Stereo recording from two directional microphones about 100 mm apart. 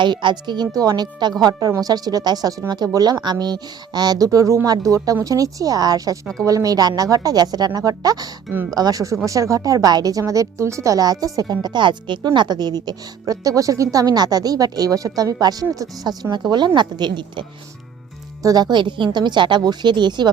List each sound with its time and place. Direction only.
0.0 s a woman's voice: 50° right (ahead or behind)
18.4 s a woman's voice: 40° right (ahead or behind)